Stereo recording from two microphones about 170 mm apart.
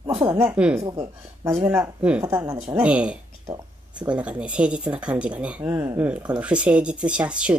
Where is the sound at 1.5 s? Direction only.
10° right (ahead or behind).